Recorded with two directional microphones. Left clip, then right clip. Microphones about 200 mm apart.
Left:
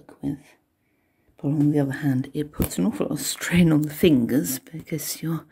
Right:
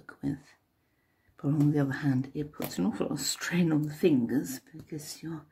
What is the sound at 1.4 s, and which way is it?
Speech, 5° left (ahead or behind).